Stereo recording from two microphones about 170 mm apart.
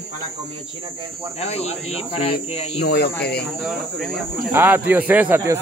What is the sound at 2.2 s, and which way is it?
Speech, 35° left (ahead or behind).